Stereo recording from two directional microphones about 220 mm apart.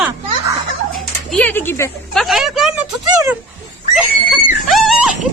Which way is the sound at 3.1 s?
15° right (ahead or behind).